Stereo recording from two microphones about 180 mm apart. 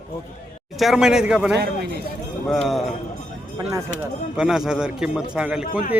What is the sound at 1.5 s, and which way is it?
Speech, 65° right (ahead or behind).